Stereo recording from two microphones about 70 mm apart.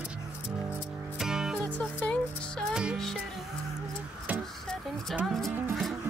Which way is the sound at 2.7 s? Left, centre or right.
Centre.